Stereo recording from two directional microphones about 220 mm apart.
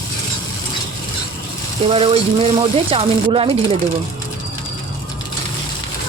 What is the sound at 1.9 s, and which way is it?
Frying, 25° right (ahead or behind).